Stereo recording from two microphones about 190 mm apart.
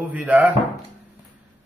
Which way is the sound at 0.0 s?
10° right (ahead or behind).